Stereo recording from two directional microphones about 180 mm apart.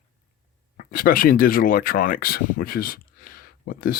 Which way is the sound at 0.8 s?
50° left (ahead or behind).